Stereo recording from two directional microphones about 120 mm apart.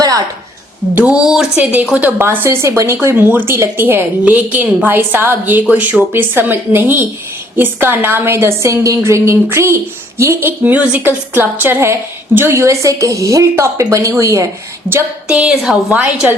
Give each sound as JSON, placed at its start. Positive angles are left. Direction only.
{"t": 0.9, "sound": "a woman's voice", "side_deg": -10}
{"t": 14.8, "sound": "a woman's voice", "side_deg": -15}